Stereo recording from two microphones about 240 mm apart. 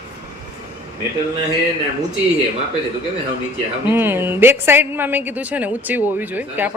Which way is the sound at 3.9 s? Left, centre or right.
Centre.